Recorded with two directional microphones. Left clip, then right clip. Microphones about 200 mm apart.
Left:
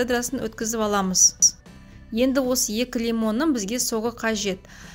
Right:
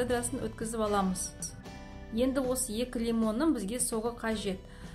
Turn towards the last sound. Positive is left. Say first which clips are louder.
# left 8 dB
turn(degrees=45)  # may be behind; listen again after turning